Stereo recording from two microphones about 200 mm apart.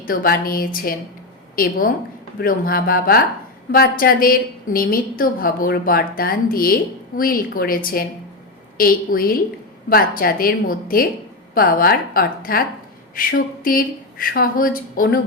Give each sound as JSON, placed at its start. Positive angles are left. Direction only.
{"t": 0.0, "sound": "a woman's voice", "side_deg": 45}